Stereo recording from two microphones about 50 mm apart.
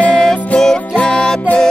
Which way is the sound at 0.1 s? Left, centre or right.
Centre.